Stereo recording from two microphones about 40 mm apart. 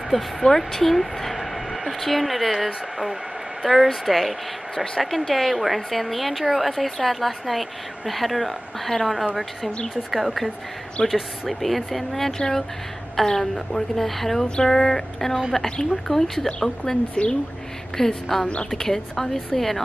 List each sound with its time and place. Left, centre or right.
0.1 s a woman's voice: centre
17.1 s a woman's voice: left
17.9 s a woman's voice: centre